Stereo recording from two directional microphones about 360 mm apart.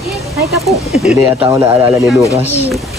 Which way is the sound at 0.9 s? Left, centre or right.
Centre.